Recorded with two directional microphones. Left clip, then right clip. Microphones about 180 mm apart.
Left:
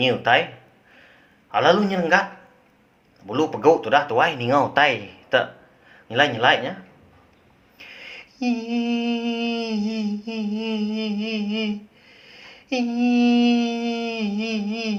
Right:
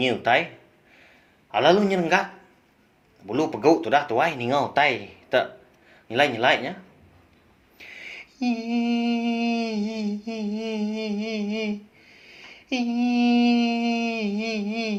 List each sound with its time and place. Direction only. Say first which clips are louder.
0.0 s mantra: left 3 dB; 30° right (ahead or behind)
1.5 s a man's voice: left 1 dB; 35° right (ahead or behind)
3.2 s mantra: left 3 dB; 30° right (ahead or behind)
6.1 s a man's voice: left 2 dB; 35° right (ahead or behind)
7.8 s mantra: even; 25° right (ahead or behind)